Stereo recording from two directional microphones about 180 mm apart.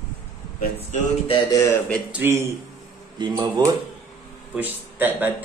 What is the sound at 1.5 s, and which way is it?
Speech, 15° left (ahead or behind).